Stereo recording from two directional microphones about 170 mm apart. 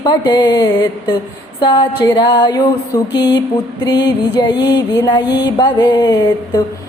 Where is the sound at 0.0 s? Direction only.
25° left (ahead or behind).